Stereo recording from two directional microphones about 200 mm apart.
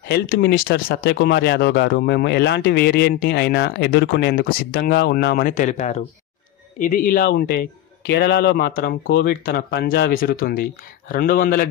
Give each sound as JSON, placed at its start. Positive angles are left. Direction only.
{"t": 0.1, "sound": "speech", "side_deg": 55}
{"t": 7.2, "sound": "speech", "side_deg": 55}